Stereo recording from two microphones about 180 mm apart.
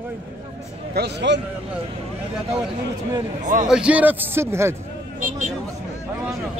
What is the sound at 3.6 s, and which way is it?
A man's voice, 5° right (ahead or behind).